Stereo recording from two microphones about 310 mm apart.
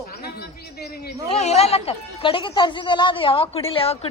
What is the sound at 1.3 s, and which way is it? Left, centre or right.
A woman's voice, left.